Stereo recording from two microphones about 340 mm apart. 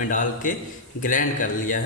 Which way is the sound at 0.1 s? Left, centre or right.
Left.